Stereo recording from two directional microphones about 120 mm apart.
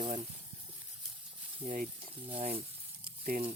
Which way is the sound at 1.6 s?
50° right (ahead or behind).